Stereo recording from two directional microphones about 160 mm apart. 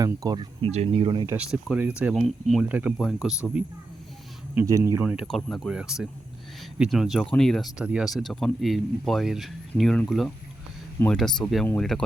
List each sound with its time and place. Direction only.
0.0 s speech: 25° right (ahead or behind)
0.7 s speech: 40° right (ahead or behind)
1.4 s speech: 5° right (ahead or behind)
4.5 s speech: 15° right (ahead or behind); by 12.0 s 5° left (ahead or behind)